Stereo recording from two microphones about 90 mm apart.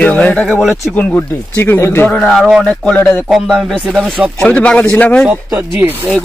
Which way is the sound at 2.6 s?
10° left (ahead or behind).